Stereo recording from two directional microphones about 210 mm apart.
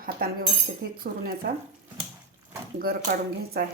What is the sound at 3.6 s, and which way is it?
Speech, 50° right (ahead or behind).